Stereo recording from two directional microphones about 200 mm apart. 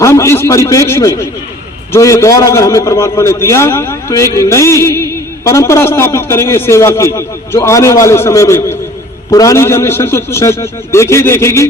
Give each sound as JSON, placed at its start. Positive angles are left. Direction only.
{"t": 0.0, "sound": "a man's voice", "side_deg": 15}